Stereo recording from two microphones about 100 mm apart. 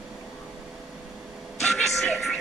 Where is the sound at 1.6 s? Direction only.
Centre (ahead or behind).